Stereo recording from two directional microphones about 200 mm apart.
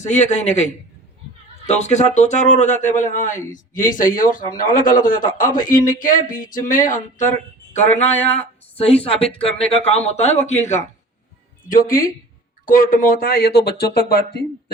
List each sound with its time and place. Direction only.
0.0 s a man's voice: 35° left (ahead or behind)